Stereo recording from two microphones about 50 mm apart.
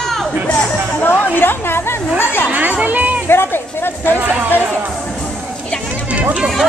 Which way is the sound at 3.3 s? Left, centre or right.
Left.